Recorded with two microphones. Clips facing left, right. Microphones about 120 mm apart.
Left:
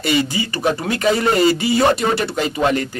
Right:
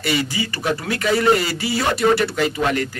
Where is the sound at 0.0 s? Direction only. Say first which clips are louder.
Left 3 dB; 25° left (ahead or behind).